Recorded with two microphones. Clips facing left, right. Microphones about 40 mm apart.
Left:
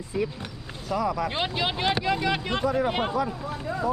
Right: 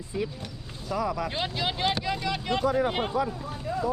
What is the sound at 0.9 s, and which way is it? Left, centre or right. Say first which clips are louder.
Speech: left 2 dB; centre.